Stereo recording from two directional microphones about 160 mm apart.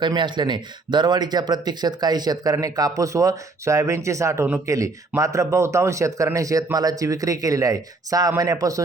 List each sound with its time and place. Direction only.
0.0 s speech: 30° right (ahead or behind)